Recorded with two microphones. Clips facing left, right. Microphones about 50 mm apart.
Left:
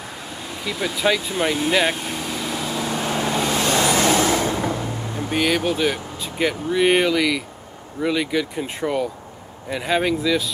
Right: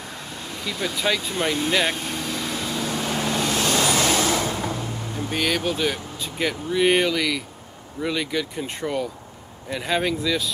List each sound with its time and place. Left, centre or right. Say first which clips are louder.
0.4 s vehicle: left 2 dB; centre
3.7 s vehicle: left 4 dB; left
5.3 s speech: left 4 dB; centre